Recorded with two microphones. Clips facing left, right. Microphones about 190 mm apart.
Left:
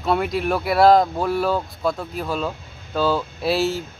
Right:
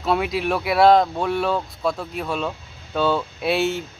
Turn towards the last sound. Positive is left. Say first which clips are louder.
# even
turn(degrees=0)  # may be behind; listen again after turning